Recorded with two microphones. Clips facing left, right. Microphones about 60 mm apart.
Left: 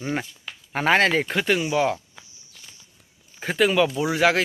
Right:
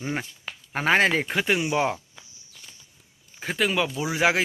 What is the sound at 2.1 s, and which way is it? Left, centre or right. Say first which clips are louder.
Walk: left 1 dB; centre.